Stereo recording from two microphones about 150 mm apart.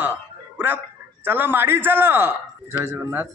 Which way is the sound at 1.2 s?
15° right (ahead or behind).